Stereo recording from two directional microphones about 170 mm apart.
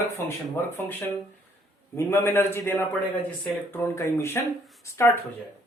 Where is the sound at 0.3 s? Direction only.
15° left (ahead or behind).